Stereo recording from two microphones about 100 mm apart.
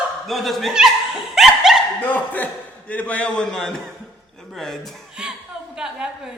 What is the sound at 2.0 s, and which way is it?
A man's voice, 15° left (ahead or behind).